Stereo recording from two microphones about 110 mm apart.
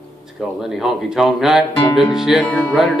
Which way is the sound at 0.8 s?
5° right (ahead or behind).